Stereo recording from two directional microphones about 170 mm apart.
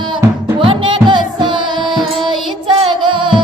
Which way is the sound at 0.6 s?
30° right (ahead or behind).